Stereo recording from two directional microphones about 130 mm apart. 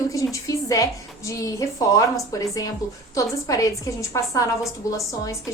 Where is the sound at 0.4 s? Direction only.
25° left (ahead or behind).